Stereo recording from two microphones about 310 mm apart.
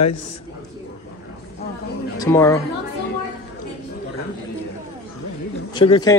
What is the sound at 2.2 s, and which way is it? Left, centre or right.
Speech, centre.